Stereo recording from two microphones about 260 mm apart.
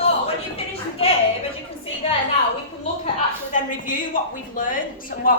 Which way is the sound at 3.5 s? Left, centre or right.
Left.